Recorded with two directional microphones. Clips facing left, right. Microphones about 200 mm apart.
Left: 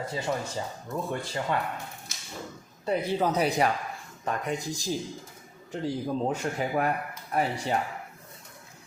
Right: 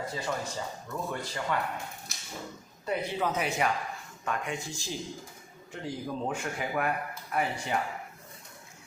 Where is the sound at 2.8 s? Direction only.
35° left (ahead or behind).